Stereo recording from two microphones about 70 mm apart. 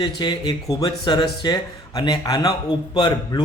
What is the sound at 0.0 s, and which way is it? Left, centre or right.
Speech, left.